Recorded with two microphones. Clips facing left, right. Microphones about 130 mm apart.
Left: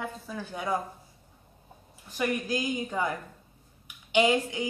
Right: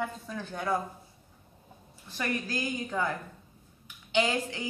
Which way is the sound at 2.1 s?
15° left (ahead or behind).